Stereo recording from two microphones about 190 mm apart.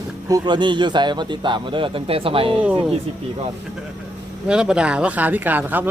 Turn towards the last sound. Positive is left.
turn(degrees=-10)  # may be behind; listen again after turning